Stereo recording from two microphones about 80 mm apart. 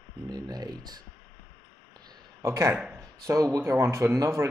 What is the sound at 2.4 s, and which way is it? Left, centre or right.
Speech, right.